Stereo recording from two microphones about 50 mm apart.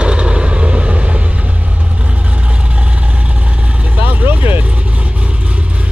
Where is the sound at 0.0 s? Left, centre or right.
Centre.